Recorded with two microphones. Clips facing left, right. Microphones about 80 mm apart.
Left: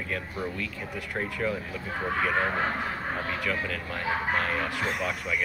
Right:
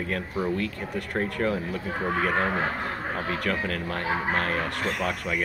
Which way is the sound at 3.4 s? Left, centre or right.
Right.